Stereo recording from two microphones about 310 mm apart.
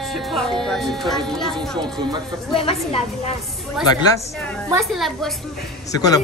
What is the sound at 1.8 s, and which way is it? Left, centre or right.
Speech, centre.